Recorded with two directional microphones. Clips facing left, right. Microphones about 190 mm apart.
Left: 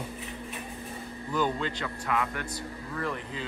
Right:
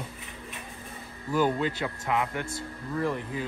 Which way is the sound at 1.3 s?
10° right (ahead or behind).